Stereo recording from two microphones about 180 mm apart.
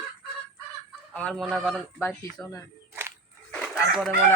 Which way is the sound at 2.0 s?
15° left (ahead or behind).